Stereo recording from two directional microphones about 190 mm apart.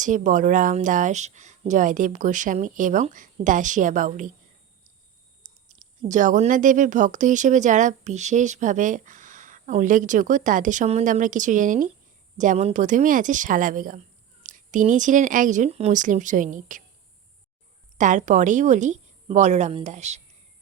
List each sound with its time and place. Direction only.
0.0 s speech: 45° right (ahead or behind)
5.6 s speech: 40° right (ahead or behind)
17.9 s speech: 40° right (ahead or behind)